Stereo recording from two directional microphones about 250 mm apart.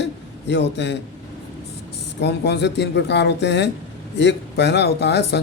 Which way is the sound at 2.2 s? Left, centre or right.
Left.